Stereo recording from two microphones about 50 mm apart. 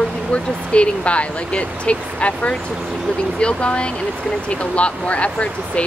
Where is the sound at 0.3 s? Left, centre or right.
Left.